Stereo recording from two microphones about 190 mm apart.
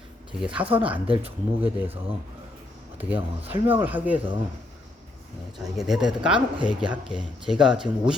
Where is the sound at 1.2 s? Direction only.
10° right (ahead or behind).